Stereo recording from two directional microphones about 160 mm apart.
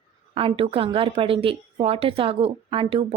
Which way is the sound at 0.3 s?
35° right (ahead or behind).